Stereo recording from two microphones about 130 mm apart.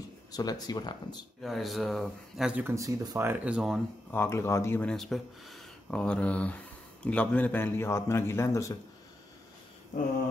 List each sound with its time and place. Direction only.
0.3 s speech: 30° left (ahead or behind)
1.4 s speech: centre (ahead or behind)
2.6 s speech: 25° right (ahead or behind)
3.3 s speech: 10° right (ahead or behind)
4.1 s speech: 20° left (ahead or behind)
4.8 s speech: 5° left (ahead or behind); by 8.7 s 20° left (ahead or behind)